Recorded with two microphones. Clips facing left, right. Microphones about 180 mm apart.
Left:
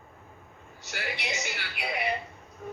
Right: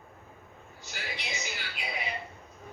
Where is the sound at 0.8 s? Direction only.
70° left (ahead or behind).